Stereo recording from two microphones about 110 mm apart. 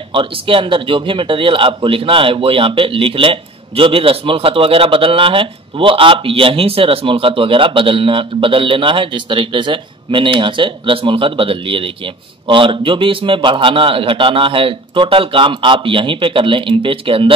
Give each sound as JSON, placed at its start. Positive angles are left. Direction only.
{"t": 0.1, "sound": "a man's voice", "side_deg": -50}